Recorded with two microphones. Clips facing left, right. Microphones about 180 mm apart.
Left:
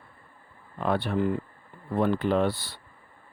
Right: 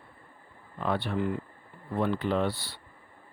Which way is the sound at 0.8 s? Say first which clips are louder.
Left 3 dB; 50° left (ahead or behind).